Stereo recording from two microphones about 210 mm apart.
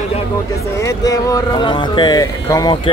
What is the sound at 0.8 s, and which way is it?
Speech, 15° left (ahead or behind).